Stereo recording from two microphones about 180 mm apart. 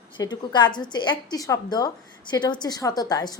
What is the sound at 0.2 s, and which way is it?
A woman's voice, 25° left (ahead or behind).